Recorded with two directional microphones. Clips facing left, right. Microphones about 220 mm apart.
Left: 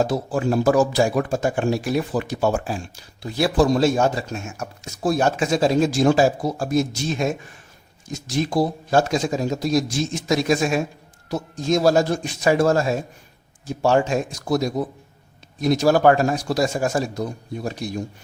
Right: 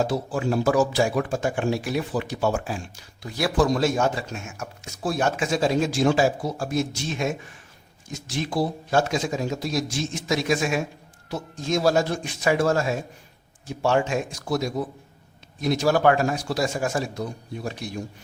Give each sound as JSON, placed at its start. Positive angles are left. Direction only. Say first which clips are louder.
{"t": 0.0, "sound": "speech", "louder": "left 3 dB", "side_deg": 40}